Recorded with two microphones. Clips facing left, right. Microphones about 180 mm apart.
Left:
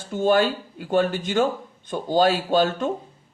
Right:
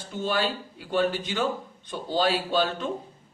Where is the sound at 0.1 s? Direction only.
50° left (ahead or behind).